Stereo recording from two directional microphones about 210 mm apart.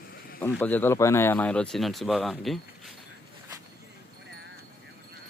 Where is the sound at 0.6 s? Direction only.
10° left (ahead or behind).